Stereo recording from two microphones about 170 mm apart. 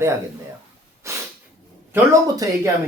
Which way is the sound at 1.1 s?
15° right (ahead or behind).